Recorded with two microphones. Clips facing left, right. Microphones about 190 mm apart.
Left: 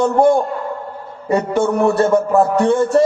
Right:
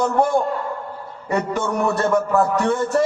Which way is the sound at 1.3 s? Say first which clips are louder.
Left 6 dB; 30° left (ahead or behind).